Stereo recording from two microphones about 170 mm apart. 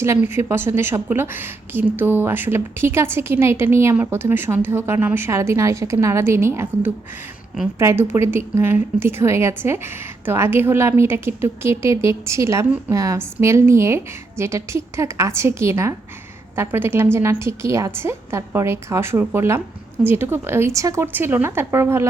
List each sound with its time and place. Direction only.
0.0 s a woman's voice: 15° right (ahead or behind)